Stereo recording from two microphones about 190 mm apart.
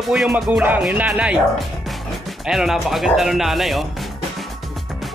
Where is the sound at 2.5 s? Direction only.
Centre (ahead or behind).